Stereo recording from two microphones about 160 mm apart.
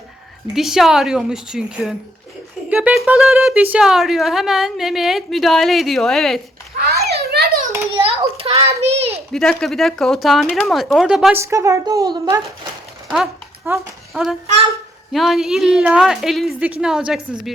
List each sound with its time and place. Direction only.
0.5 s a woman's voice: centre (ahead or behind)
6.7 s children playing: 85° right
7.9 s a sound: 35° right (ahead or behind)
9.3 s a woman's voice: 5° left (ahead or behind)
11.3 s a woman's voice: 20° right (ahead or behind)
13.7 s a sound: centre (ahead or behind)
15.1 s a woman's voice: centre (ahead or behind)